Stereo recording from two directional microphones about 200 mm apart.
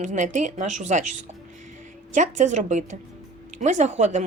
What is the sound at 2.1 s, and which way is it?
Speech, 40° right (ahead or behind).